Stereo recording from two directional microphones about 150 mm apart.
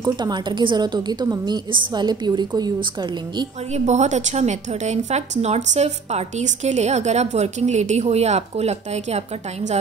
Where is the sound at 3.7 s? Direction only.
50° right (ahead or behind).